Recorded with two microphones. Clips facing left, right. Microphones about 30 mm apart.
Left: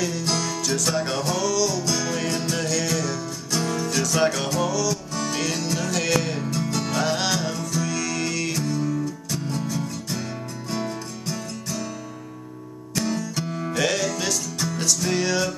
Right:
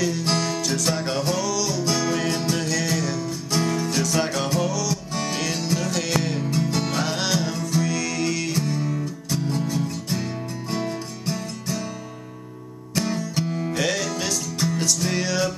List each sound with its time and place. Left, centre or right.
0.2 s music: right
0.6 s music: centre
1.8 s music: centre
6.5 s music: centre
8.5 s music: right
12.9 s music: centre
13.5 s music: centre